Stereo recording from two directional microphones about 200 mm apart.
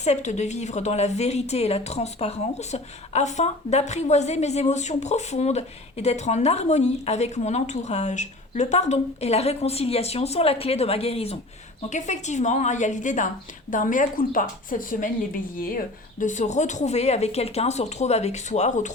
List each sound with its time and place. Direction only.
0.0 s a woman's voice: 35° left (ahead or behind)
16.2 s a woman's voice: 40° left (ahead or behind)